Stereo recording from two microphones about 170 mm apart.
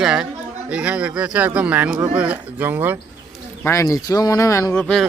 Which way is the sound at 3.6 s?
15° left (ahead or behind).